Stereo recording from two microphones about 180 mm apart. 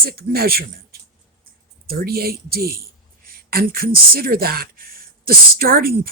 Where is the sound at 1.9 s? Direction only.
60° right (ahead or behind).